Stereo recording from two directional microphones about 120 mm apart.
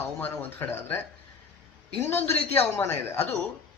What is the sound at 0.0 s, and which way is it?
Speech, 15° left (ahead or behind).